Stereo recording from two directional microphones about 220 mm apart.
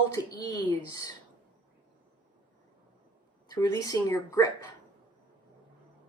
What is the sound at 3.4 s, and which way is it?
Speech, 15° left (ahead or behind).